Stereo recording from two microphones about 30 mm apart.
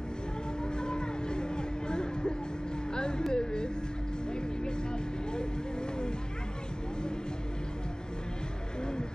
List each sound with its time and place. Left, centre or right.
0.7 s music: left
2.9 s vehicle: left
3.3 s music: left